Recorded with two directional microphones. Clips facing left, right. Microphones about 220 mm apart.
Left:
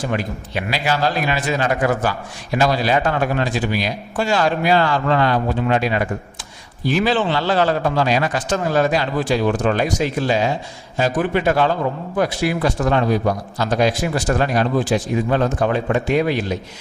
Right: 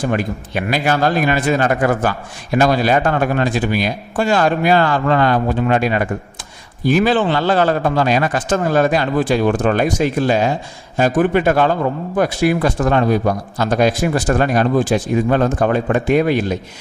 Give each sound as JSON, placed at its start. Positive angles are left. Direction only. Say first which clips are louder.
{"t": 0.0, "sound": "speech", "louder": "right 4 dB", "side_deg": -50}